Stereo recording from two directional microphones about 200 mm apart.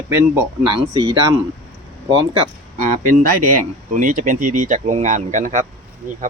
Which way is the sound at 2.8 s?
40° right (ahead or behind).